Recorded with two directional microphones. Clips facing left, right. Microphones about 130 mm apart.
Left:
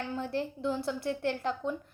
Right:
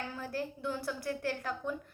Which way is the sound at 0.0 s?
25° left (ahead or behind).